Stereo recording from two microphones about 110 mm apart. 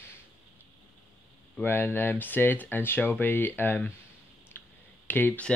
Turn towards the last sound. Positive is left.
turn(degrees=15)  # may be behind; listen again after turning